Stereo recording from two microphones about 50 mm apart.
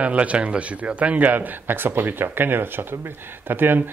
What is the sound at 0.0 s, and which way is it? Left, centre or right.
Speech, right.